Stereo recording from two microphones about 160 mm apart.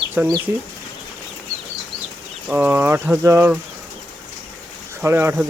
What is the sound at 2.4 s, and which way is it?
Speech, 10° right (ahead or behind).